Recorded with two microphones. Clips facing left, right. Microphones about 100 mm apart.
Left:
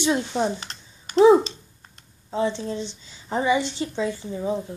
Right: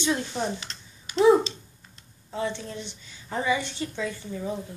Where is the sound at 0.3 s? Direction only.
30° left (ahead or behind).